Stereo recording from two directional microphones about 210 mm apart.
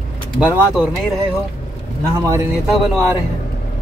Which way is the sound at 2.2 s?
15° right (ahead or behind).